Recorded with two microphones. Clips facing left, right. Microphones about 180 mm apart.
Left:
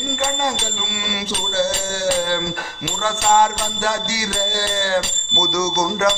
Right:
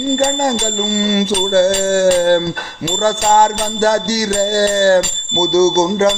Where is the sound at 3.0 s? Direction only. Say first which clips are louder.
Right 4 dB; 40° right (ahead or behind).